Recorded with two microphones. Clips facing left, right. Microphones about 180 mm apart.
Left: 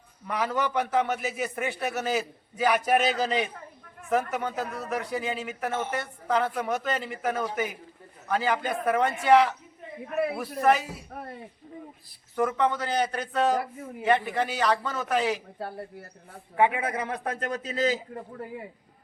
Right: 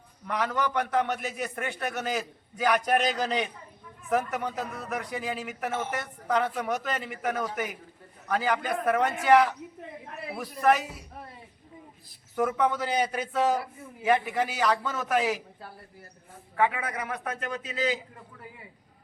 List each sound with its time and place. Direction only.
0.3 s a man's voice: 5° left (ahead or behind)
10.6 s a man's voice: centre (ahead or behind)
11.1 s a sound: 55° left (ahead or behind)
12.4 s a man's voice: 5° right (ahead or behind)
16.6 s a man's voice: 20° left (ahead or behind); by 18.3 s 40° left (ahead or behind)